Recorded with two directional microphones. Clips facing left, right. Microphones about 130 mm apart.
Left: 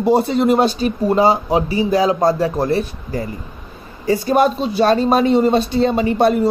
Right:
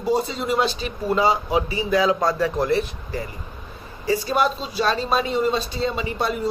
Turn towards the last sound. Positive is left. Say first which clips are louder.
# left 10 dB
turn(degrees=55)  # may be behind; listen again after turning